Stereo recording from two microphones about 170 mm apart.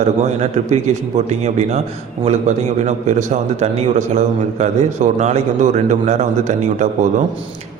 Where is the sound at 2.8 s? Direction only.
45° right (ahead or behind).